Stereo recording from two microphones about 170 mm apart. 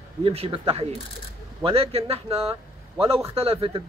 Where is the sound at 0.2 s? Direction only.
35° right (ahead or behind).